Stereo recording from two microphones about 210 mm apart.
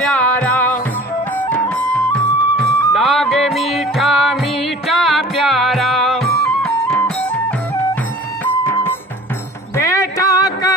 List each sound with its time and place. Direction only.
0.0 s music: 5° left (ahead or behind)
9.8 s music: 15° left (ahead or behind)